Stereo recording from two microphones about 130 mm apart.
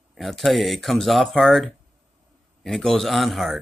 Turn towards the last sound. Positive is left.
turn(degrees=0)  # may be behind; listen again after turning